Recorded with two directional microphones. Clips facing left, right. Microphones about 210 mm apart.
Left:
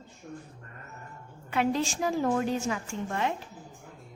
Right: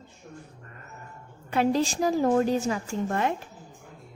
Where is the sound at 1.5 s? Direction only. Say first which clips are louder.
Right 4 dB; 35° right (ahead or behind).